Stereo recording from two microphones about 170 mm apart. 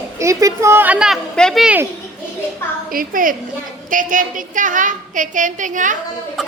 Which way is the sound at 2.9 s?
55° right (ahead or behind).